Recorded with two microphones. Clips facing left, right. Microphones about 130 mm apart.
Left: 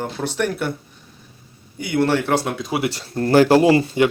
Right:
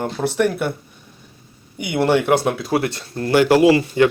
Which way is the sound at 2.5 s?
Centre (ahead or behind).